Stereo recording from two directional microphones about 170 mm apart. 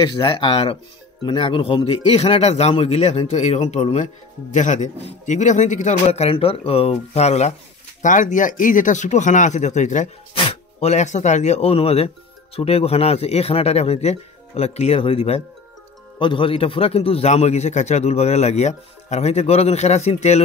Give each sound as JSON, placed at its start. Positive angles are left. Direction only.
{"t": 0.0, "sound": "a man's voice", "side_deg": 30}